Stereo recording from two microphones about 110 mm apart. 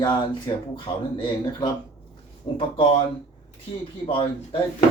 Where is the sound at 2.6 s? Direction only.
55° left (ahead or behind).